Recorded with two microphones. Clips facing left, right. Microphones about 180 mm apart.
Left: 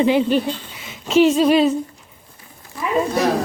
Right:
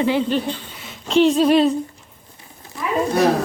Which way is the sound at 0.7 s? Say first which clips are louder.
Left 1 dB; centre (ahead or behind).